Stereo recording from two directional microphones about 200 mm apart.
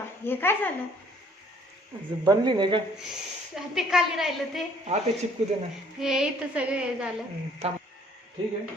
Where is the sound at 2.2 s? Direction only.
20° right (ahead or behind).